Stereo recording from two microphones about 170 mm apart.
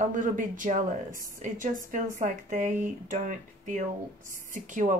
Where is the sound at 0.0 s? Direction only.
50° right (ahead or behind).